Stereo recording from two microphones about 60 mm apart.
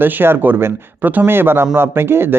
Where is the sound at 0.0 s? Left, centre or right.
Right.